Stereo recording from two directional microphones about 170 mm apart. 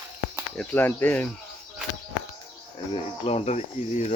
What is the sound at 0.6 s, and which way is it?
Speech, 10° left (ahead or behind).